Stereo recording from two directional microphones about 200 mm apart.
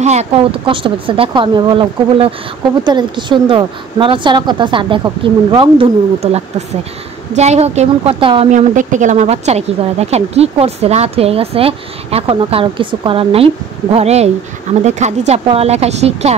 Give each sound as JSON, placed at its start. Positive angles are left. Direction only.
{"t": 0.0, "sound": "a woman's voice", "side_deg": -35}